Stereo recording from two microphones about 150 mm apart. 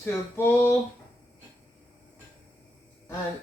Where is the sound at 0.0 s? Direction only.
15° left (ahead or behind).